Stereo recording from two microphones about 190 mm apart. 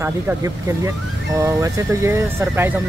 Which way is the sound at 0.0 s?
15° right (ahead or behind).